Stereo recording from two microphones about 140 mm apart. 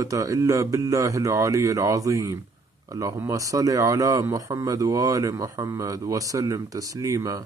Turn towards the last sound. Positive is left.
turn(degrees=-20)  # may be behind; listen again after turning